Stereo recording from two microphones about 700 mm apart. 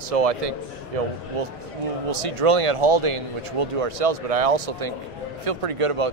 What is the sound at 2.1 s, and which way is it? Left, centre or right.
A man's voice, right.